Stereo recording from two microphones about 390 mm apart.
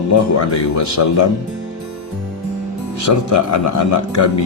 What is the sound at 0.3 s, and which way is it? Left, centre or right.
Speech, left.